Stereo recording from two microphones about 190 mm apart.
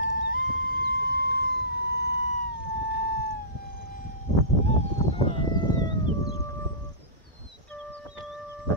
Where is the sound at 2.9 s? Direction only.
55° left (ahead or behind).